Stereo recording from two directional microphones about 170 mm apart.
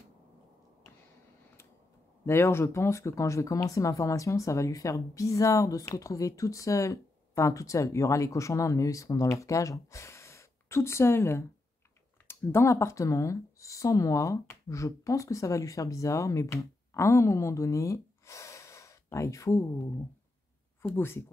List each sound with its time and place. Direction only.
2.2 s speech: 15° left (ahead or behind)
20.9 s speech: 15° left (ahead or behind)